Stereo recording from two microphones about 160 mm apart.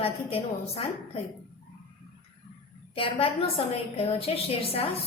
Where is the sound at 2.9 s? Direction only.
35° left (ahead or behind).